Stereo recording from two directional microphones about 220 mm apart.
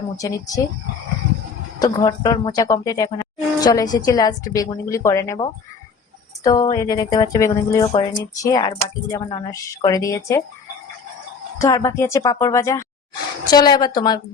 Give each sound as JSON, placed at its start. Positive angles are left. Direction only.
{"t": 0.2, "sound": "speech", "side_deg": 15}
{"t": 1.8, "sound": "speech", "side_deg": 15}
{"t": 11.6, "sound": "speech", "side_deg": 15}